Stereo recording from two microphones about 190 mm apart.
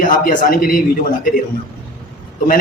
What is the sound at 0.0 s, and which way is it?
Speech, 45° left (ahead or behind).